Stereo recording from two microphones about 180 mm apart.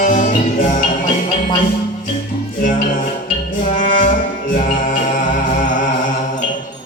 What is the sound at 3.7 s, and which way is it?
Brass instrument, 45° left (ahead or behind).